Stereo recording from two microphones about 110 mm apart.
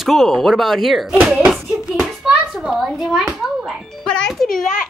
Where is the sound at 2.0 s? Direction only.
5° right (ahead or behind).